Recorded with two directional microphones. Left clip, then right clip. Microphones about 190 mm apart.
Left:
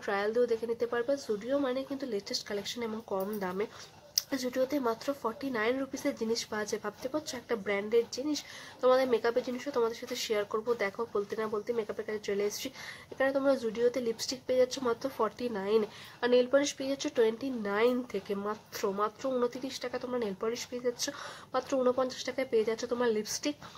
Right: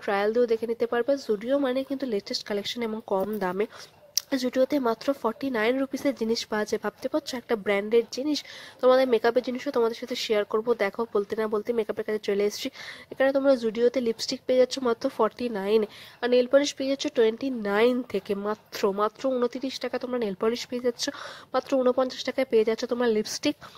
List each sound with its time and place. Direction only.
0.0 s speech: 40° right (ahead or behind)
16.2 s speech: 30° right (ahead or behind)